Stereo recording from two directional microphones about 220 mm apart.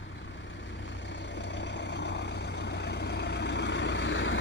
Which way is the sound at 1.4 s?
55° left (ahead or behind).